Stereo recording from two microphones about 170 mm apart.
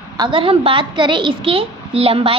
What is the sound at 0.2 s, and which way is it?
A woman's voice, 30° right (ahead or behind).